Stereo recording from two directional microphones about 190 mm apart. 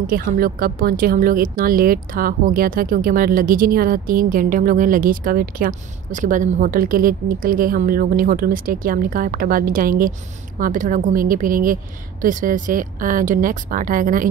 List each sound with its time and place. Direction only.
0.0 s speech: 50° right (ahead or behind)